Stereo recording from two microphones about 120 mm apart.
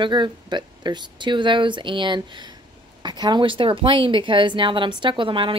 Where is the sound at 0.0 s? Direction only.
40° right (ahead or behind).